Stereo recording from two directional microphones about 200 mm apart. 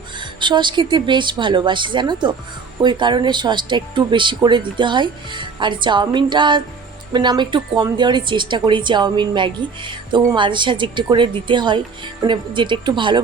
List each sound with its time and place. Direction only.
0.3 s speech: 25° right (ahead or behind)